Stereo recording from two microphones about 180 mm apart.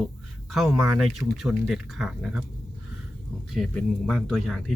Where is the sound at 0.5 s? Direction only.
Centre (ahead or behind).